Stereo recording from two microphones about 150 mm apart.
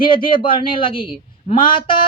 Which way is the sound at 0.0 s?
35° left (ahead or behind).